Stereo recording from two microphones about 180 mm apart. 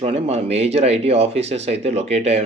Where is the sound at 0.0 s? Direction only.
35° right (ahead or behind).